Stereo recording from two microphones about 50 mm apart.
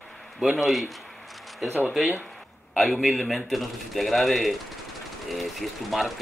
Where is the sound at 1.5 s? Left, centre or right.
Centre.